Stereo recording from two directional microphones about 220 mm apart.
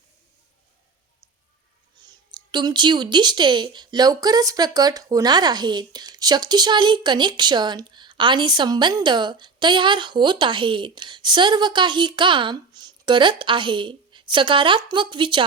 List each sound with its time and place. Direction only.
2.3 s speech: 20° right (ahead or behind)